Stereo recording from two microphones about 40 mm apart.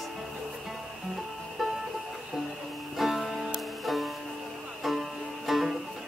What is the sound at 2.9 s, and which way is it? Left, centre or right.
Music, centre.